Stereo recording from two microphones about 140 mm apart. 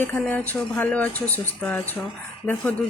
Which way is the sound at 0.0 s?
10° left (ahead or behind).